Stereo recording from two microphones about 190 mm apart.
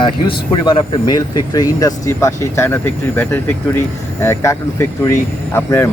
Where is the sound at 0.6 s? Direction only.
25° left (ahead or behind).